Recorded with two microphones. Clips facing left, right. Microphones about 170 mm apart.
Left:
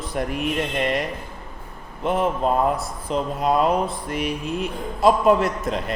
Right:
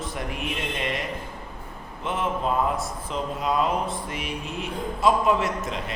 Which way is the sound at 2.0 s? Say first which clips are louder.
Left 6 dB; 40° left (ahead or behind).